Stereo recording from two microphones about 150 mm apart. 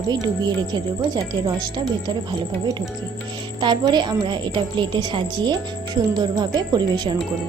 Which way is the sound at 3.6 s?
30° right (ahead or behind).